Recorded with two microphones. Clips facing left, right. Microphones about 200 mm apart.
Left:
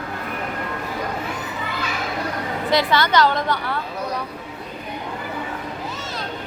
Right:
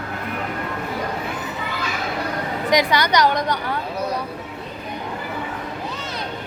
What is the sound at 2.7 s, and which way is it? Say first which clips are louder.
Speech: even; 15° right (ahead or behind).